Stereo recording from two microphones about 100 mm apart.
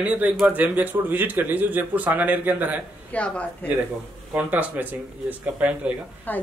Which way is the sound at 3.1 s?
15° left (ahead or behind).